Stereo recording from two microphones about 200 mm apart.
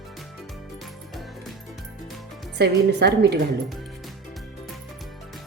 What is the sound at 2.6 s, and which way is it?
Speech, 55° right (ahead or behind).